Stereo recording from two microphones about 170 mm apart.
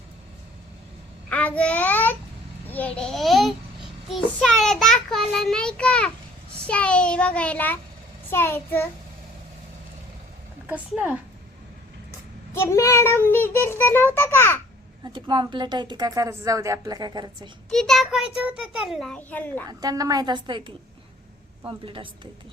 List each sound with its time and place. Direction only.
1.3 s a child's voice: 10° left (ahead or behind)
10.7 s a woman's voice: 10° right (ahead or behind)
12.5 s a child's voice: 15° left (ahead or behind)
15.0 s a woman's voice: 25° right (ahead or behind)
17.7 s a child's voice: 5° left (ahead or behind)
19.6 s a woman's voice: 20° right (ahead or behind)